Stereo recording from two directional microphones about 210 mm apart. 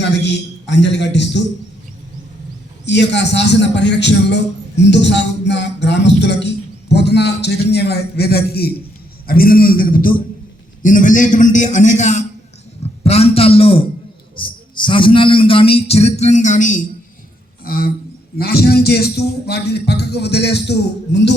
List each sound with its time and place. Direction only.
0.0 s a man's voice: 55° left (ahead or behind)
2.8 s a man's voice: 55° left (ahead or behind)